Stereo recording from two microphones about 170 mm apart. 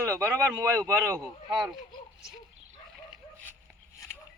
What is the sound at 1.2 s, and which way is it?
Speech, centre (ahead or behind).